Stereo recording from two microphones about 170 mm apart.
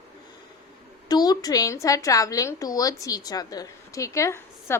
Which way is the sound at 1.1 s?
25° left (ahead or behind).